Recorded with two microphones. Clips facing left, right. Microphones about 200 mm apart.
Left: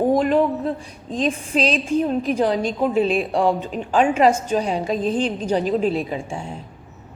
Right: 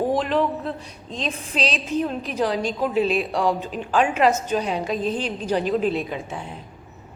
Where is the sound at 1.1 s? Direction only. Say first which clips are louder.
Left 7 dB; 50° left (ahead or behind).